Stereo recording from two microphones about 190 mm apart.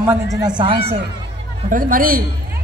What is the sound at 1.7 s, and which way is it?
Speech, 45° right (ahead or behind).